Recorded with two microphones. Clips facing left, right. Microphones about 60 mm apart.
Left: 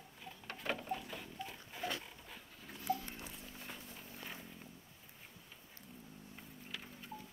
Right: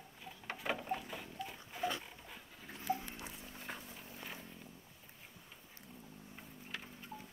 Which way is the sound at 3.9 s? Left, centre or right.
Centre.